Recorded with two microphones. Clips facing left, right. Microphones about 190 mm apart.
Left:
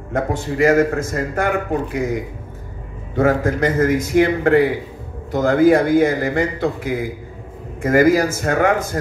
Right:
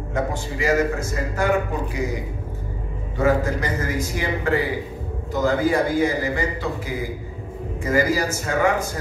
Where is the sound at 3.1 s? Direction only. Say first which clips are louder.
Left 4 dB; 55° left (ahead or behind).